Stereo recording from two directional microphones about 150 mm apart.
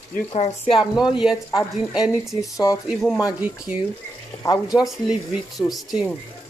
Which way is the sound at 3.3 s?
10° right (ahead or behind).